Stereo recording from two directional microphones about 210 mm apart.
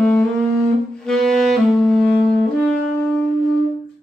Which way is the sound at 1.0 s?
Centre (ahead or behind).